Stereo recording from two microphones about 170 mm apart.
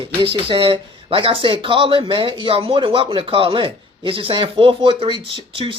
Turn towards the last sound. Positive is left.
turn(degrees=-30)  # may be behind; listen again after turning